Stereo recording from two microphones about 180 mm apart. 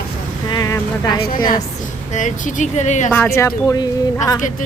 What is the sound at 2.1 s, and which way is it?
Speech, 45° left (ahead or behind).